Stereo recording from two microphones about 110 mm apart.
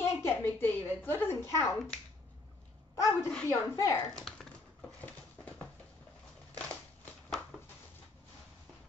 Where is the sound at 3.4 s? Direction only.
25° left (ahead or behind).